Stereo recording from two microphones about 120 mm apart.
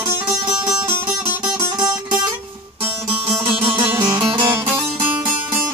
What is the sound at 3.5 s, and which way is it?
Music, 15° right (ahead or behind).